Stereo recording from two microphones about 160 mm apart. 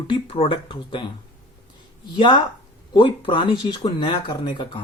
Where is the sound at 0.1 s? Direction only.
35° left (ahead or behind).